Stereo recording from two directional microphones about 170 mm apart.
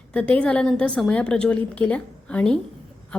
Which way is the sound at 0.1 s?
10° left (ahead or behind).